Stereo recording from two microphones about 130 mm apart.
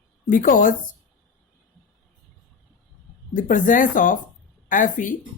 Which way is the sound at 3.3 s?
90° left.